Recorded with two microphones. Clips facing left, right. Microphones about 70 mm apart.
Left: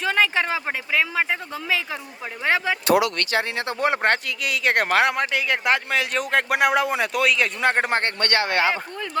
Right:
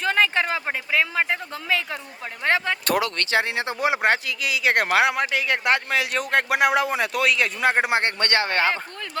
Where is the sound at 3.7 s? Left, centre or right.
Centre.